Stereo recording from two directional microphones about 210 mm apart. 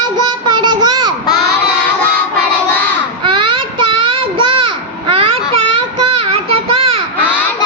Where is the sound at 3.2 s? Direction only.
20° right (ahead or behind).